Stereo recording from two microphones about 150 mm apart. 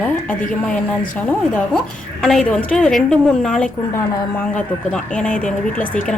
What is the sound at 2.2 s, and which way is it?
A woman's voice, 5° left (ahead or behind).